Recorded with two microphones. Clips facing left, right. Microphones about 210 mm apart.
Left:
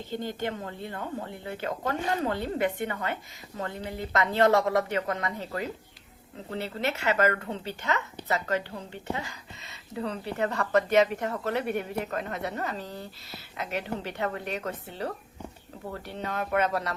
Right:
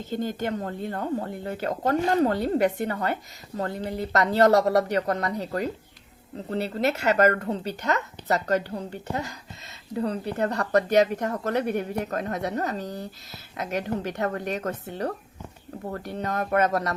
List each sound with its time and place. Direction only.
0.0 s speech: 45° right (ahead or behind)